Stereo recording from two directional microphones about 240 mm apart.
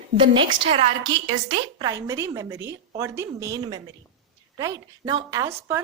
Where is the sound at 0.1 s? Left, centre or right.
Right.